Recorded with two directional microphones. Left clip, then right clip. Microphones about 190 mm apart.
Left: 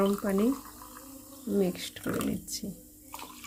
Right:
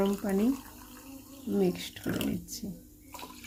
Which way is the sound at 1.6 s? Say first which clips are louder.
Right 2 dB; 15° left (ahead or behind).